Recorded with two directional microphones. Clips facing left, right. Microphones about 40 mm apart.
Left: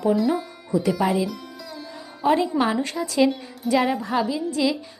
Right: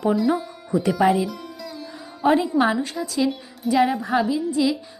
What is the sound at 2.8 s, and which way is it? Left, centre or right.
Speech, centre.